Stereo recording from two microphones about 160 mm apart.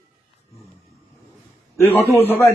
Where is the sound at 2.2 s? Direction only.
15° left (ahead or behind).